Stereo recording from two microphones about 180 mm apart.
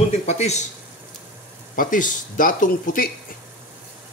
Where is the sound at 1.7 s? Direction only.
50° left (ahead or behind).